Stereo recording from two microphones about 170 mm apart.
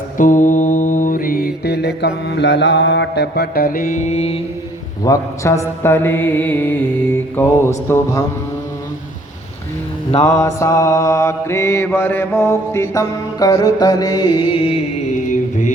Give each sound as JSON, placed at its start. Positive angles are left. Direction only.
{"t": 0.2, "sound": "music", "side_deg": 50}
{"t": 1.6, "sound": "mantra", "side_deg": 75}
{"t": 5.0, "sound": "mantra", "side_deg": 15}
{"t": 10.2, "sound": "mantra", "side_deg": 15}
{"t": 14.3, "sound": "mantra", "side_deg": 30}